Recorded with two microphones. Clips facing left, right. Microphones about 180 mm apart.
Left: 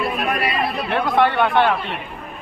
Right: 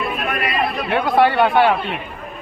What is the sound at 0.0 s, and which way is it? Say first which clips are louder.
Chatter: left 1 dB; 35° left (ahead or behind).